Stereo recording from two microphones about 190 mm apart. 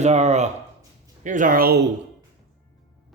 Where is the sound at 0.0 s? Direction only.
35° right (ahead or behind).